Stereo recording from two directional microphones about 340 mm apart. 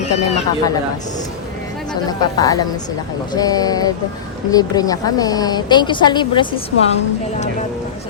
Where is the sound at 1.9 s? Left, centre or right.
Centre.